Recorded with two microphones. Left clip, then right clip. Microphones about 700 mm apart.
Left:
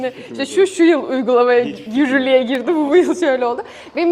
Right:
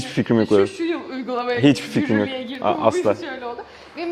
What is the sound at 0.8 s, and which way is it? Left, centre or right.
A woman's voice, left.